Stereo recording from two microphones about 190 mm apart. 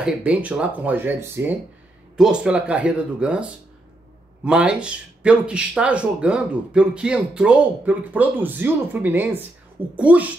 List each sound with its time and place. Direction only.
0.0 s speech: 5° right (ahead or behind)